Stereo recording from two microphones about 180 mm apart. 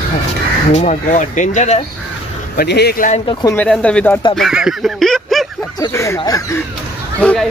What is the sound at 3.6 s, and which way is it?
Speech, 5° left (ahead or behind).